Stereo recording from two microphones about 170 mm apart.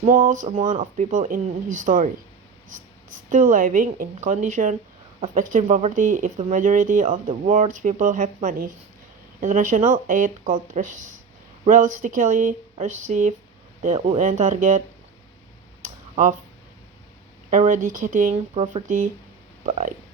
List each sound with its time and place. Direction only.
0.0 s speech: 50° right (ahead or behind)
3.2 s speech: 50° right (ahead or behind)
15.8 s a sound: 45° right (ahead or behind)
17.5 s speech: 45° right (ahead or behind)